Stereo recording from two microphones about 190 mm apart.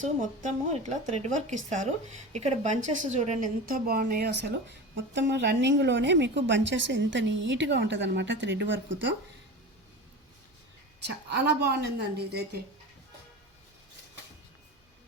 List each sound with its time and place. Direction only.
0.0 s a woman's voice: 40° right (ahead or behind)
4.9 s a woman's voice: 65° right (ahead or behind)
11.0 s a woman's voice: 60° right (ahead or behind)